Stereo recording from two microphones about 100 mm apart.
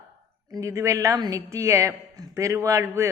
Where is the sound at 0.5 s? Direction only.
35° right (ahead or behind).